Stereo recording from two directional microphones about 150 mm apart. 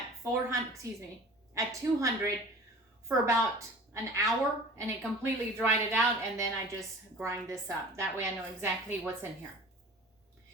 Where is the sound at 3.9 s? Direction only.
20° right (ahead or behind).